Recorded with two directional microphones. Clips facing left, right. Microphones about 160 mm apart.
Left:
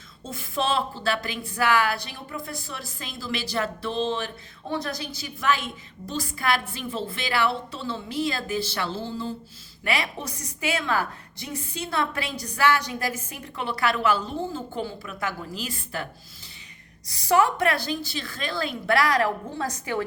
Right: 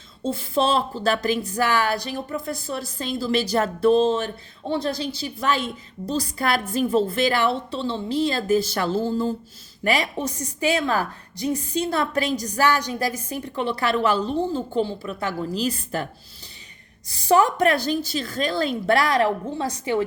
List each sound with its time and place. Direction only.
0.2 s a woman's voice: 35° right (ahead or behind)
4.7 s a woman's voice: 30° right (ahead or behind); by 9.3 s 45° right (ahead or behind)
9.9 s a woman's voice: 30° right (ahead or behind)
17.1 s a woman's voice: 30° right (ahead or behind)